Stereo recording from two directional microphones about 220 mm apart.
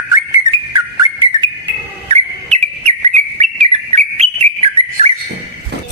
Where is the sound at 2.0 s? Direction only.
30° right (ahead or behind).